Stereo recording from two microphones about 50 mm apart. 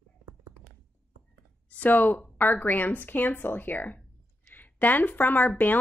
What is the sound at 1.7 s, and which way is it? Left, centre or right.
Speech, left.